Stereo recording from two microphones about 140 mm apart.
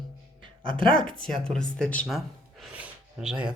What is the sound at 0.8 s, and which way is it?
Speech, 40° right (ahead or behind).